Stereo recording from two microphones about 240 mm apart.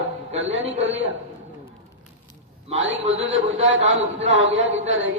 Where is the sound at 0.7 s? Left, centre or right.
Right.